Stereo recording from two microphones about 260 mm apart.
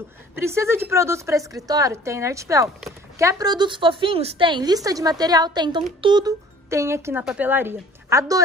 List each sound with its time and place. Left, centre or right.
0.5 s a woman's voice: centre